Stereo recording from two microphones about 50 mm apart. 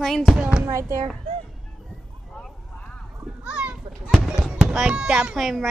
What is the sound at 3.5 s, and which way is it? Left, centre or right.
Children playing, right.